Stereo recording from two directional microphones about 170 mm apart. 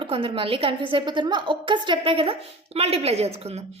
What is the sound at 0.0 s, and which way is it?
A woman's voice, 30° right (ahead or behind).